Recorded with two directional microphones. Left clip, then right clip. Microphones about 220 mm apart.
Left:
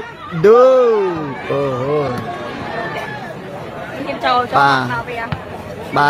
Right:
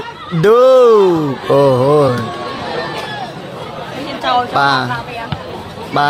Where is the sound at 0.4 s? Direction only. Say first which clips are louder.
Right 1 dB; 35° right (ahead or behind).